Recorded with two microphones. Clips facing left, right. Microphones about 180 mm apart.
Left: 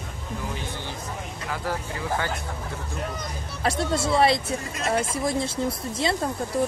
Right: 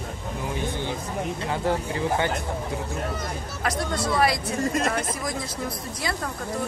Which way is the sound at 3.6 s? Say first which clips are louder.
Left 2 dB; 25° left (ahead or behind).